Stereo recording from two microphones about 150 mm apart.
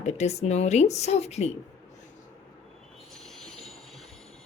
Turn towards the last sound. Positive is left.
turn(degrees=0)  # may be behind; listen again after turning